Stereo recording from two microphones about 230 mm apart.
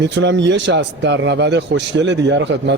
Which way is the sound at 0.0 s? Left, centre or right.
Right.